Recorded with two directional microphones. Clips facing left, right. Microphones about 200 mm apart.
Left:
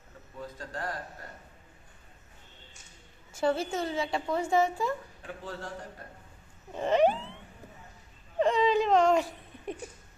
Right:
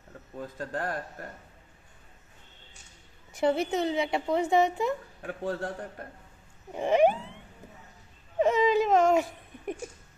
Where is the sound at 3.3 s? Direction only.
20° right (ahead or behind).